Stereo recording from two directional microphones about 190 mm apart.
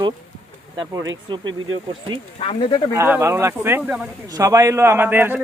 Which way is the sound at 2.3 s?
30° left (ahead or behind).